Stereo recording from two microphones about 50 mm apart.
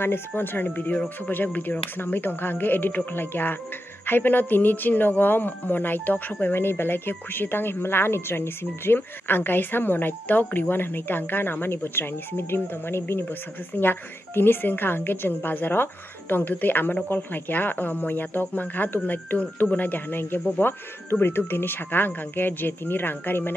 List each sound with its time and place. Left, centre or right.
0.0 s speech: left
6.5 s speech: left